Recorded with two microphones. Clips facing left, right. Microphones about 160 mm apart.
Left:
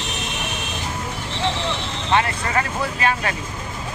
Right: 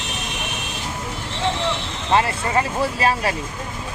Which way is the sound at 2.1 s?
30° right (ahead or behind).